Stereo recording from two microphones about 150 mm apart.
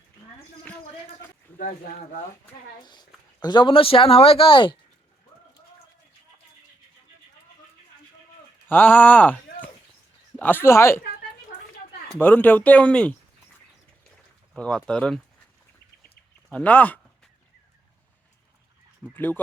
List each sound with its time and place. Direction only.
2.8 s speech: 30° left (ahead or behind)
8.6 s speech: 10° left (ahead or behind)
12.0 s speech: 10° left (ahead or behind)
14.5 s speech: centre (ahead or behind)
16.0 s a sound: 10° left (ahead or behind)
19.1 s speech: 10° left (ahead or behind)